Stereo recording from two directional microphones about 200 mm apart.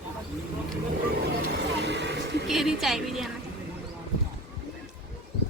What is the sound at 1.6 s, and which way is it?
Vehicle, 60° right (ahead or behind).